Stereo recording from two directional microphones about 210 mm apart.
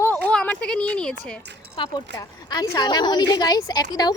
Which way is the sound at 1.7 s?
20° left (ahead or behind).